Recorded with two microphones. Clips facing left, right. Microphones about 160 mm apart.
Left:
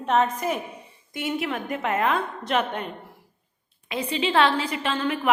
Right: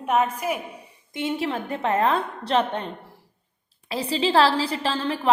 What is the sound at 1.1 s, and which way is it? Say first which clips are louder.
A woman's voice: right 2 dB; 25° right (ahead or behind).